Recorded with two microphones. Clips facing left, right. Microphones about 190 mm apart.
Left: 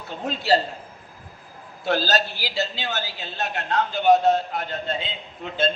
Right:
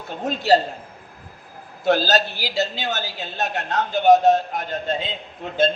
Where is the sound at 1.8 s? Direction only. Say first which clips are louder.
Right 4 dB; 45° right (ahead or behind).